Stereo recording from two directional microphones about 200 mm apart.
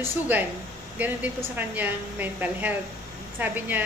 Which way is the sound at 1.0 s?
10° right (ahead or behind).